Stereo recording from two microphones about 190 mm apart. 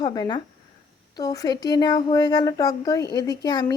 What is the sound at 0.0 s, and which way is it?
A woman's voice, 20° left (ahead or behind).